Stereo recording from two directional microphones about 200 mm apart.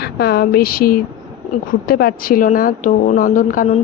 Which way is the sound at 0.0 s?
50° left (ahead or behind).